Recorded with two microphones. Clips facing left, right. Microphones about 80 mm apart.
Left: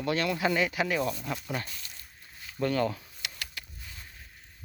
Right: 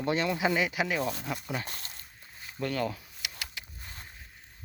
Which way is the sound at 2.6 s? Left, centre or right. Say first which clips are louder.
Left 4 dB; centre.